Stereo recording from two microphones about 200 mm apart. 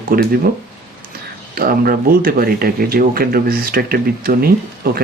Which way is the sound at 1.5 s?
50° right (ahead or behind).